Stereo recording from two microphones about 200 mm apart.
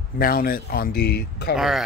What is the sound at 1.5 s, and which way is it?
Speech, centre (ahead or behind).